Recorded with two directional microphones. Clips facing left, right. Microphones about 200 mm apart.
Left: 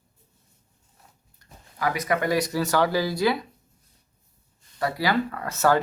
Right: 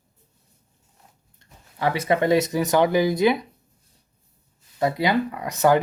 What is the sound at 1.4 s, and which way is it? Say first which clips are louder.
Speech: right 3 dB; 25° right (ahead or behind).